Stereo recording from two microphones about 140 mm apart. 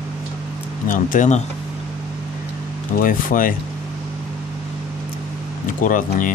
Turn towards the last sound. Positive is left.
turn(degrees=70)  # may be behind; listen again after turning